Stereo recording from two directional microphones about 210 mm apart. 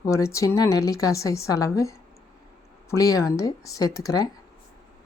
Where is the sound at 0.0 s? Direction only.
15° left (ahead or behind).